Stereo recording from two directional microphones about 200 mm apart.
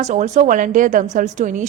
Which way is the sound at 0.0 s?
35° right (ahead or behind).